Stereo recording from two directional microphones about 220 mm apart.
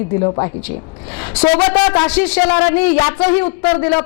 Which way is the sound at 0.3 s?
25° left (ahead or behind).